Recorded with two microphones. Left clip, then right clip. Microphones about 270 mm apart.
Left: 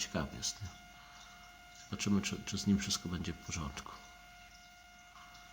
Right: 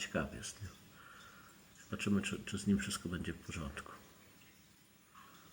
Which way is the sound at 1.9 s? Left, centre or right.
Centre.